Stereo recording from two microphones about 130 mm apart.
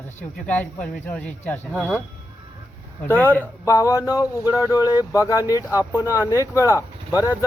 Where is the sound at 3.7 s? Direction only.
25° left (ahead or behind).